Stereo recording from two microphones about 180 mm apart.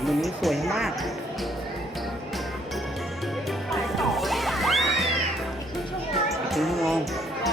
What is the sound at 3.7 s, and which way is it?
Music, centre (ahead or behind).